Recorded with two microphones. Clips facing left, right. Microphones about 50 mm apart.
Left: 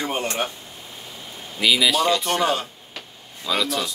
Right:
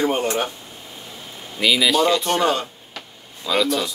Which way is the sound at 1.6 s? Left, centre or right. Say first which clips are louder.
Right 2 dB; centre.